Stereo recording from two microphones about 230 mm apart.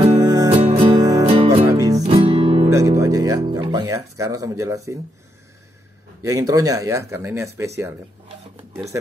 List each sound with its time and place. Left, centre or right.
0.0 s music: centre
2.7 s music: centre
3.9 s speech: centre
6.2 s speech: centre